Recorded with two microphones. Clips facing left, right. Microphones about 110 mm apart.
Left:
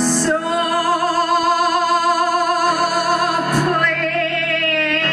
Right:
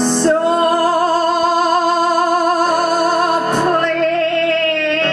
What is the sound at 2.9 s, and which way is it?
Music, 25° right (ahead or behind).